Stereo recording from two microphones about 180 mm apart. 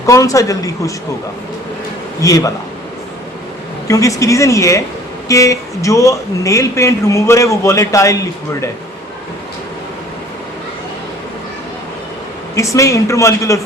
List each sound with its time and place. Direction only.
0.0 s speech: 20° left (ahead or behind)
2.2 s speech: 20° left (ahead or behind)
3.8 s speech: 20° left (ahead or behind)
12.5 s speech: 15° left (ahead or behind)